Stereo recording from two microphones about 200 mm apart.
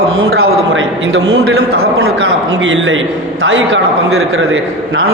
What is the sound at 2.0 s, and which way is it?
A man's voice, 70° right (ahead or behind).